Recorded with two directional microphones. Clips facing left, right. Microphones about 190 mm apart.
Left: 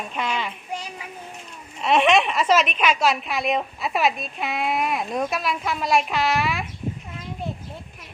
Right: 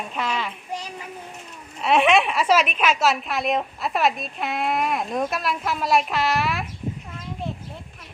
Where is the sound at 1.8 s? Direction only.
5° right (ahead or behind).